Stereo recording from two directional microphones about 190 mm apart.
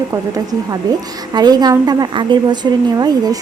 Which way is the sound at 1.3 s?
20° right (ahead or behind).